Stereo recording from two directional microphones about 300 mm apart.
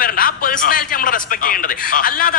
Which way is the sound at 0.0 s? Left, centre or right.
Left.